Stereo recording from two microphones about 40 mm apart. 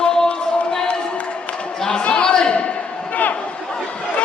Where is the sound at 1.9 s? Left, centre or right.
Left.